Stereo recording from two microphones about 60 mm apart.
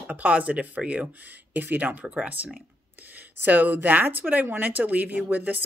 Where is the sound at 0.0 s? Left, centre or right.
Right.